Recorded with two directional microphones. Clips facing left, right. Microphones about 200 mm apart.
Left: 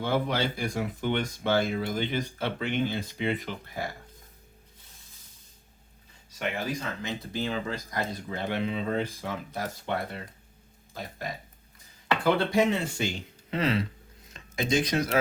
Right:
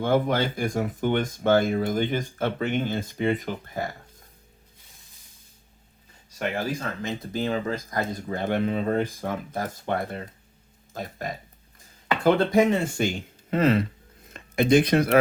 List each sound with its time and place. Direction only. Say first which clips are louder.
0.0 s speech: right 5 dB; 50° right (ahead or behind)
6.7 s speech: right 3 dB; 50° right (ahead or behind)
12.2 s speech: right 5 dB; 45° right (ahead or behind)